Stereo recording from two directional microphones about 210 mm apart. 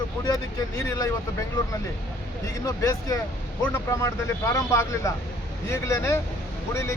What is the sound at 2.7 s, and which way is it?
Speech, 15° left (ahead or behind).